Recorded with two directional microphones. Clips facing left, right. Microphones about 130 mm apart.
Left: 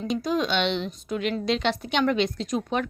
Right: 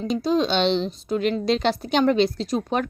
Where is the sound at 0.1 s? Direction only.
30° right (ahead or behind).